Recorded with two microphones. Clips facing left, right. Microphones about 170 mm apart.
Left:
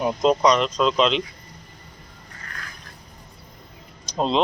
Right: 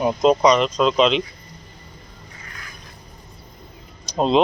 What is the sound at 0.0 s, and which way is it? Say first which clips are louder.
Speech: right 3 dB; 5° right (ahead or behind).